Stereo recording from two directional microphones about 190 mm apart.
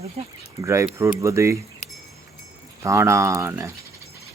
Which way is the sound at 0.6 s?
15° right (ahead or behind).